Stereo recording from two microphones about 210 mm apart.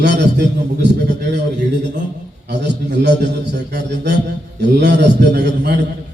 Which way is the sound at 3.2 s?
55° right (ahead or behind).